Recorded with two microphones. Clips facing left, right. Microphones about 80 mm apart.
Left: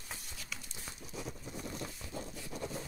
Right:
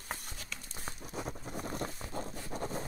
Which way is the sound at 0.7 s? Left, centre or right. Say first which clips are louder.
Right 4 dB; right.